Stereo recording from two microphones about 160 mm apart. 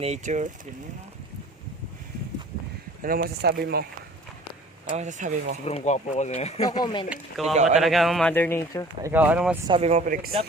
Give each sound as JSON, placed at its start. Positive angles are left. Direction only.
{"t": 0.0, "sound": "speech", "side_deg": -45}
{"t": 3.0, "sound": "speech", "side_deg": -70}
{"t": 4.9, "sound": "speech", "side_deg": -50}
{"t": 5.6, "sound": "speech", "side_deg": 45}
{"t": 6.7, "sound": "speech", "side_deg": 30}
{"t": 7.1, "sound": "speech", "side_deg": 0}
{"t": 8.3, "sound": "speech", "side_deg": 15}
{"t": 9.0, "sound": "speech", "side_deg": -10}
{"t": 9.6, "sound": "speech", "side_deg": -35}